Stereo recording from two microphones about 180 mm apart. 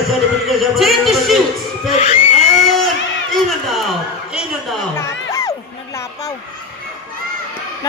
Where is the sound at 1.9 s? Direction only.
40° left (ahead or behind).